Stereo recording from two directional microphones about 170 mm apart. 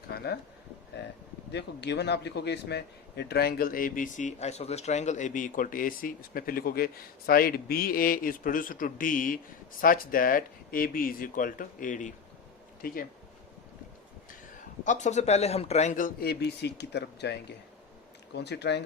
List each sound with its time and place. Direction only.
0.1 s a sound: 70° left (ahead or behind)
1.0 s a man's voice: 80° left; by 12.1 s 50° left (ahead or behind)
12.8 s speech: 60° left (ahead or behind)
14.8 s speech: 45° left (ahead or behind); by 17.3 s 85° left
18.3 s speech: 80° left